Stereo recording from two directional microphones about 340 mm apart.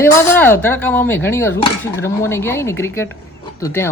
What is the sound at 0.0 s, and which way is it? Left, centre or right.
Speech, centre.